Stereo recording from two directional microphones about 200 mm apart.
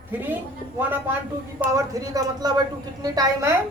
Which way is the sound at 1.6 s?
15° right (ahead or behind).